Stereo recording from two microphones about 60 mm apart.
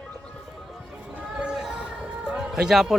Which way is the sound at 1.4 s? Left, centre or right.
Centre.